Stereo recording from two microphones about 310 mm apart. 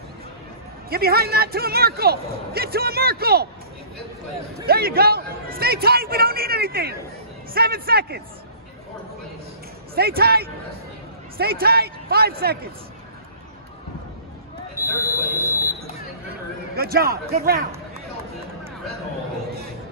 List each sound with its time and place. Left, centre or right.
0.8 s speech: right
4.6 s speech: right
9.9 s speech: right
14.9 s a sound: centre
16.7 s speech: right